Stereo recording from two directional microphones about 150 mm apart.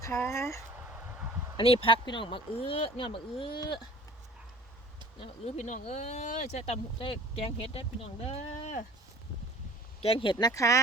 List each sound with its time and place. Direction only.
0.0 s speech: 20° left (ahead or behind)
1.5 s speech: 40° left (ahead or behind)
5.2 s speech: 45° left (ahead or behind)
10.0 s speech: 40° left (ahead or behind)
10.3 s speech: 20° left (ahead or behind)